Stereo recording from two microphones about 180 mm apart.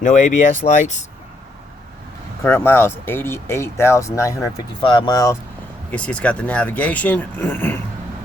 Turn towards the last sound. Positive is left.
turn(degrees=10)  # may be behind; listen again after turning